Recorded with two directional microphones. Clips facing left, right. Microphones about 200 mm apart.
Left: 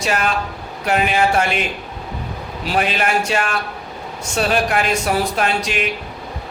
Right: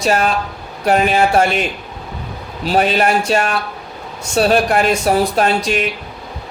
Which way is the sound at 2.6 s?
35° right (ahead or behind).